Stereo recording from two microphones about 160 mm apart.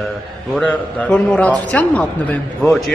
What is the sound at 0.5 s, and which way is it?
A man's voice, 5° left (ahead or behind).